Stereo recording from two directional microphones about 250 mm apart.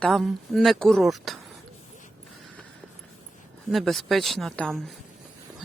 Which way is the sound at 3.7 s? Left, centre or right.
Centre.